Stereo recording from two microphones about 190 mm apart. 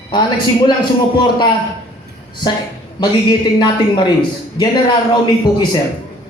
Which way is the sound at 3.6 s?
25° left (ahead or behind).